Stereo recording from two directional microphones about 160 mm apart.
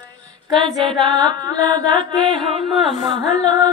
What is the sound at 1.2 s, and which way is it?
Music, 25° right (ahead or behind).